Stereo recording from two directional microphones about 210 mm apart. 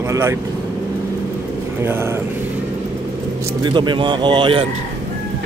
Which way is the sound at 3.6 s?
20° right (ahead or behind).